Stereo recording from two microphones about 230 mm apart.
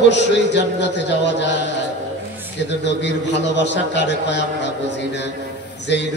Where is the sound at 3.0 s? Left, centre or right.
Left.